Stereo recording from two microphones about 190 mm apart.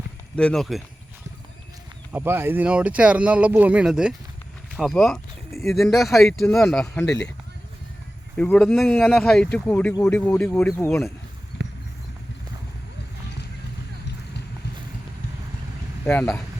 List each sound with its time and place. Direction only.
0.3 s speech: 5° left (ahead or behind)
2.1 s speech: 10° right (ahead or behind); by 7.3 s 5° left (ahead or behind)
8.4 s speech: 5° left (ahead or behind)
11.5 s a sound: 65° left (ahead or behind)
16.0 s speech: 5° left (ahead or behind)